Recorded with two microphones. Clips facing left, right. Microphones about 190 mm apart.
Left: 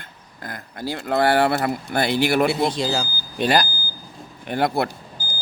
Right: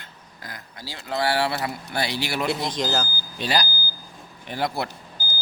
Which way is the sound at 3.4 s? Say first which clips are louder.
Left 6 dB; 55° left (ahead or behind).